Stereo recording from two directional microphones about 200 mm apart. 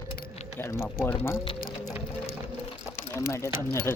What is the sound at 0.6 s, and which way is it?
Speech, 10° left (ahead or behind).